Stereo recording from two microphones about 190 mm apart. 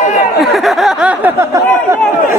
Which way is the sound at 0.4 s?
Centre (ahead or behind).